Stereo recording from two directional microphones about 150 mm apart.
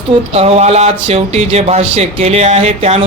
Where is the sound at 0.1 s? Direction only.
45° right (ahead or behind).